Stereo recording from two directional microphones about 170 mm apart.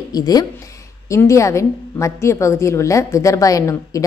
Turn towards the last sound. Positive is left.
turn(degrees=20)  # may be behind; listen again after turning